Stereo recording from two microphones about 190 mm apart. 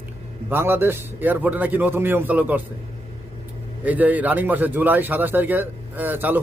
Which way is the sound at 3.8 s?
10° right (ahead or behind).